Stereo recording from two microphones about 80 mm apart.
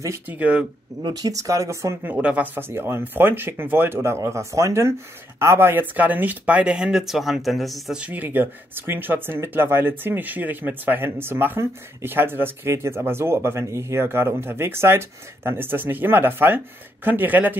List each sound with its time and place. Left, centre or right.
0.3 s speech: centre
1.0 s speech: right
2.0 s speech: centre
8.1 s speech: right